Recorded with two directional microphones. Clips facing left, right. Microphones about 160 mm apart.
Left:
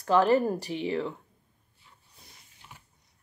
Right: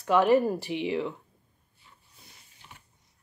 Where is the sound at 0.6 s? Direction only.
35° left (ahead or behind).